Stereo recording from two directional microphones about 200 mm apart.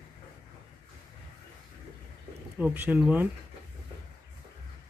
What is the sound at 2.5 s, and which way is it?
Speech, 10° right (ahead or behind).